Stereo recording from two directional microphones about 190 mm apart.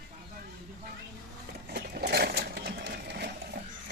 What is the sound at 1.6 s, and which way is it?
Sewing machine, 55° right (ahead or behind).